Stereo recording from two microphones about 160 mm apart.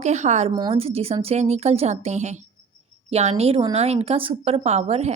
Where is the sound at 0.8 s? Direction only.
40° right (ahead or behind).